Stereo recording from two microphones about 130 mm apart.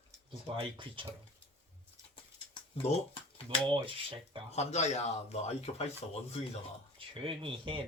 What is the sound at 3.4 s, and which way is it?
Speech, 40° right (ahead or behind).